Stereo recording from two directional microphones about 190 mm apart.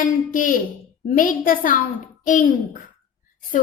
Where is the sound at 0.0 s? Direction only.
45° left (ahead or behind).